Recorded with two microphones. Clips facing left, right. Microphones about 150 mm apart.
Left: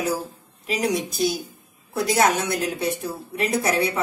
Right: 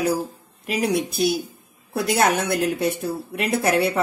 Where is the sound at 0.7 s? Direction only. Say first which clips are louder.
Right 2 dB; 55° right (ahead or behind).